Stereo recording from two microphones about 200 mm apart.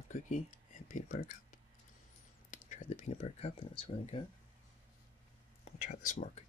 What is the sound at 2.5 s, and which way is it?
Speech, 35° left (ahead or behind).